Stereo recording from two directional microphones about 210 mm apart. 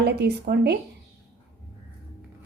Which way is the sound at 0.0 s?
50° right (ahead or behind).